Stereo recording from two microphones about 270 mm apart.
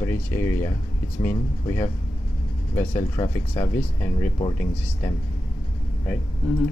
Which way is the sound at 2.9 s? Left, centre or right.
Centre.